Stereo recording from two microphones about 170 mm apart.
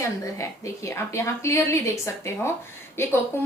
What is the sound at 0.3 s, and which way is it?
A woman's voice, 15° left (ahead or behind).